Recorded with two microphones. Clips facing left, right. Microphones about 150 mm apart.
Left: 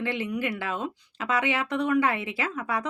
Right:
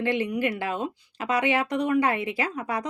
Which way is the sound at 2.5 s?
40° right (ahead or behind).